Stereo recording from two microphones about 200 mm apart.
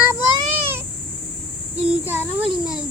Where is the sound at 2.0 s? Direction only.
10° right (ahead or behind).